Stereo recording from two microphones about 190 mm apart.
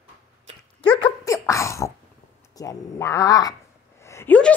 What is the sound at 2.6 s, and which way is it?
A woman's voice, 15° left (ahead or behind).